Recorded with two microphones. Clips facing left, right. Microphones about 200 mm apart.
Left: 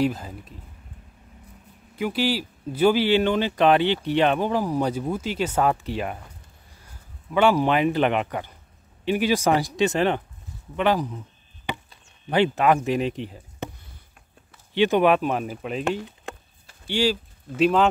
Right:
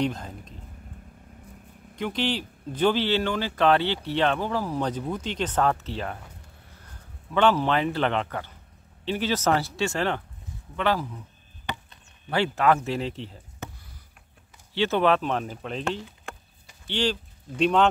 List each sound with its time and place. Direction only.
0.0 s a sound: 5° left (ahead or behind)
2.0 s speech: 5° left (ahead or behind)
7.3 s speech: 10° left (ahead or behind)
12.3 s speech: 20° left (ahead or behind)
14.7 s speech: 15° left (ahead or behind)
16.8 s speech: 10° left (ahead or behind)